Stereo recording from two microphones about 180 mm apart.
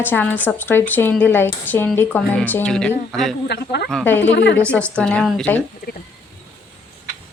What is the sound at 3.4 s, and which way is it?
A woman's voice, 65° left (ahead or behind).